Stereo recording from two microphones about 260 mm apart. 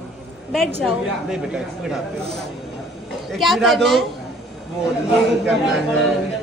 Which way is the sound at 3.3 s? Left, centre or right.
Centre.